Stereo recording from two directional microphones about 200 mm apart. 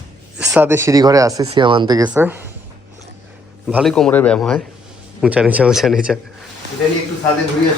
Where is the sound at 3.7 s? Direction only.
5° right (ahead or behind).